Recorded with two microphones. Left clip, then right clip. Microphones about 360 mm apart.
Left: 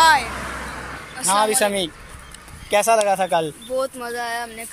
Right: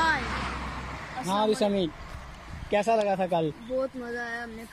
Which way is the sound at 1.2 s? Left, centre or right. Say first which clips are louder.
Left 8 dB; left.